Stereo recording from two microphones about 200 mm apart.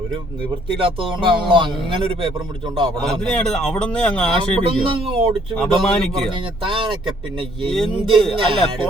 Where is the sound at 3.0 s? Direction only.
5° left (ahead or behind).